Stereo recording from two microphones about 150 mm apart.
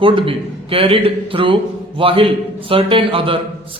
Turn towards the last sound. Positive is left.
turn(degrees=-35)  # may be behind; listen again after turning